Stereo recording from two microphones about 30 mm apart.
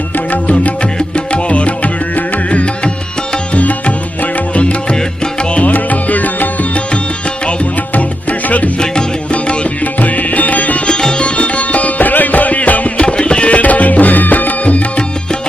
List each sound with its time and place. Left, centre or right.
0.8 s music: left
3.5 s music: left
4.6 s music: left
4.9 s music: left
5.6 s music: left
7.4 s music: left
9.3 s music: left
9.8 s music: left
10.8 s music: left
11.3 s music: left
13.0 s music: left
13.6 s music: left
14.6 s music: left